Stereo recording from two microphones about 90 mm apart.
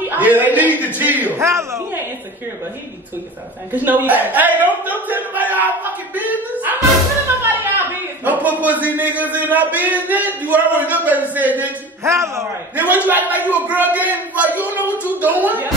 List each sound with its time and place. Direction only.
0.0 s a man's voice: 20° right (ahead or behind)
1.4 s a man's voice: 30° right (ahead or behind)
3.7 s a man's voice: 20° right (ahead or behind)
5.0 s battle cry: 20° right (ahead or behind)
6.1 s a woman's voice: 20° right (ahead or behind)
7.4 s a man's voice: 20° right (ahead or behind)
12.0 s a man's voice: 35° right (ahead or behind)
12.7 s a man's voice: 20° right (ahead or behind)